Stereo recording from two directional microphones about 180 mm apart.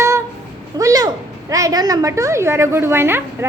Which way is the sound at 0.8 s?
20° right (ahead or behind).